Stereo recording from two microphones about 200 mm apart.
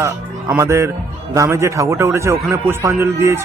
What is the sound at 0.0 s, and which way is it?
Speech, 15° right (ahead or behind).